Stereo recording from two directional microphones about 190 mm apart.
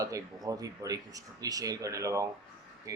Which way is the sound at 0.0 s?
15° right (ahead or behind).